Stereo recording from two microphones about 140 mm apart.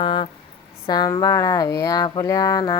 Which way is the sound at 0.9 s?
30° left (ahead or behind).